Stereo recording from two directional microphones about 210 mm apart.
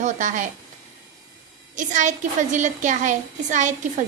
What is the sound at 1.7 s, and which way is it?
A woman's voice, 35° right (ahead or behind).